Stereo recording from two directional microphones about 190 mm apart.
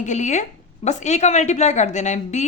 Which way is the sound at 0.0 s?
40° left (ahead or behind).